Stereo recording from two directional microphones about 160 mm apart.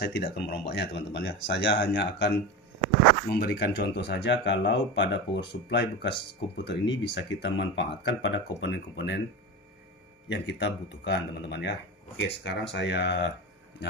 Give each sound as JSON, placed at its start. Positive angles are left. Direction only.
{"t": 0.0, "sound": "speech", "side_deg": 90}
{"t": 10.2, "sound": "speech", "side_deg": 90}